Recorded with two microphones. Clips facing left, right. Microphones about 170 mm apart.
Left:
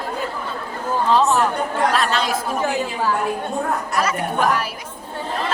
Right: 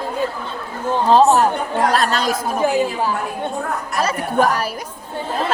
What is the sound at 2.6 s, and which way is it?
Speech, 15° right (ahead or behind).